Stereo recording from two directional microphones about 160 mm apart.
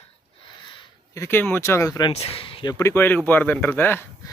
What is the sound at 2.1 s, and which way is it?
Speech, 40° left (ahead or behind).